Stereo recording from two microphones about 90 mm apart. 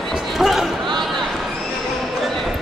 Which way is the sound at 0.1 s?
5° right (ahead or behind).